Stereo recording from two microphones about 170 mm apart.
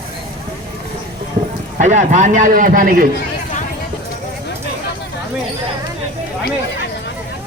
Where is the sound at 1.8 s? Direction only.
45° right (ahead or behind).